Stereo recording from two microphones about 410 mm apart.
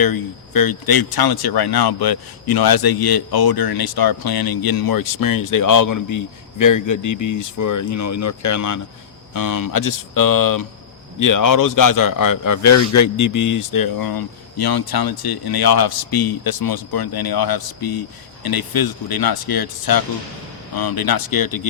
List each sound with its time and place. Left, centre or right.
0.0 s speech: left